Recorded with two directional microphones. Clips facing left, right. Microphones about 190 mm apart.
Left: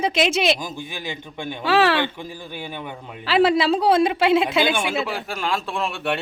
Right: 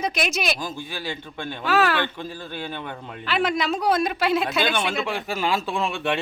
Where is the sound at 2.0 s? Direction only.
15° left (ahead or behind).